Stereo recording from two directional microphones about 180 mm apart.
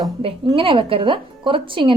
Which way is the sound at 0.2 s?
30° right (ahead or behind).